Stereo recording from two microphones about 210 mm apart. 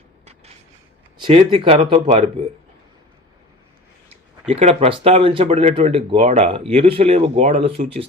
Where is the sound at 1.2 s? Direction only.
30° right (ahead or behind).